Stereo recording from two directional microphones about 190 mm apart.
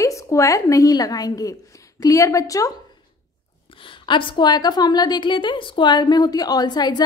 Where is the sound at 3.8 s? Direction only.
25° left (ahead or behind).